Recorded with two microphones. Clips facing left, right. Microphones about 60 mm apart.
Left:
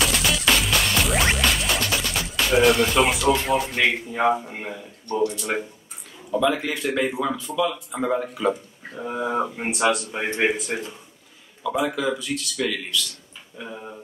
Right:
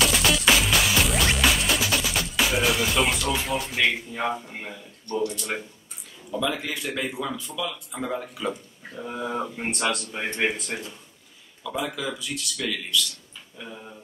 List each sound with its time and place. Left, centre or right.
0.0 s music: centre
4.1 s a man's voice: centre
13.6 s speech: centre